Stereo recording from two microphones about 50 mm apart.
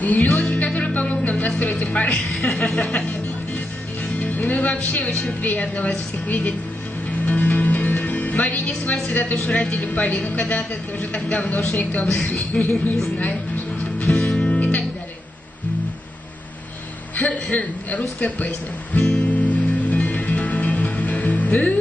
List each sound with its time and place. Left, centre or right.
0.0 s music: left
2.1 s speech: centre
2.6 s music: centre
4.2 s speech: left
7.2 s music: left
9.1 s speech: left
12.6 s speech: left
14.1 s music: left
17.2 s speech: left
18.9 s music: left